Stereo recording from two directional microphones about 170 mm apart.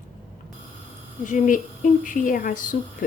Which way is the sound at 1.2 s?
50° left (ahead or behind).